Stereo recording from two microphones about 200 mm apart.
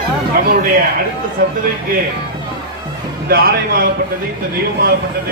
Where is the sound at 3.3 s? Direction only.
50° right (ahead or behind).